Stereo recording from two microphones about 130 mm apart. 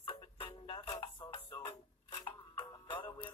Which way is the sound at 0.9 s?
25° left (ahead or behind).